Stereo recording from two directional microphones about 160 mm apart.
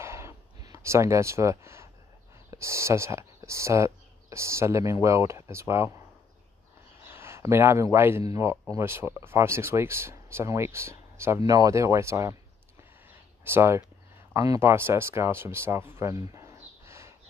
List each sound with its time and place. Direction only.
0.0 s a sound: 15° right (ahead or behind)
2.5 s speech: 15° right (ahead or behind)
7.1 s speech: 15° right (ahead or behind)
13.4 s speech: 15° right (ahead or behind)